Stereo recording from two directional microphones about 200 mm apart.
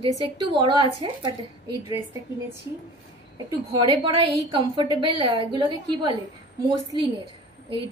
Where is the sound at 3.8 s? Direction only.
20° right (ahead or behind).